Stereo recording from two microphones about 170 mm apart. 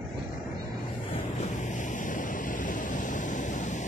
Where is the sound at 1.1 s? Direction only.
45° left (ahead or behind).